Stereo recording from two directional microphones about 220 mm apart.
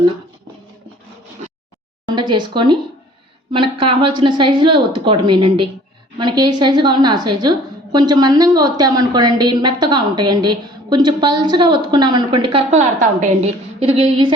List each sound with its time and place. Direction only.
2.0 s a woman's voice: 20° right (ahead or behind)
12.7 s a woman's voice: 35° right (ahead or behind)